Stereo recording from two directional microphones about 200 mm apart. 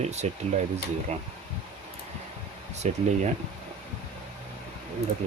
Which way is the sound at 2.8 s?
35° right (ahead or behind).